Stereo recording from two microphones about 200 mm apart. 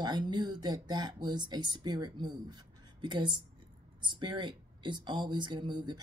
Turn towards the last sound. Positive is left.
turn(degrees=-20)  # may be behind; listen again after turning